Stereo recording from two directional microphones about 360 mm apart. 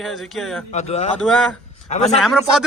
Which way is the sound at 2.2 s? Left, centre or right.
Centre.